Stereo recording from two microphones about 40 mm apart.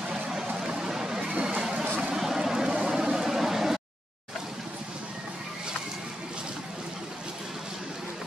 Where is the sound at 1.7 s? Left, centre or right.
Right.